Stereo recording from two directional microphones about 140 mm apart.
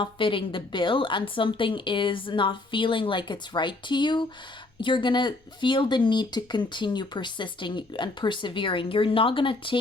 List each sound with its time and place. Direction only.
0.0 s speech: 35° left (ahead or behind)